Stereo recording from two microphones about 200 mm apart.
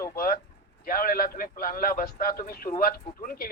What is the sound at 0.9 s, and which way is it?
A man's voice, 45° left (ahead or behind).